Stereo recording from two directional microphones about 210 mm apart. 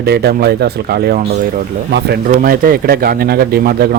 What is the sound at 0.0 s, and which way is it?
Speech, 50° right (ahead or behind).